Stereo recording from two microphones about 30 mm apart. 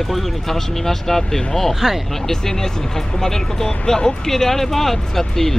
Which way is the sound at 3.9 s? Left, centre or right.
Left.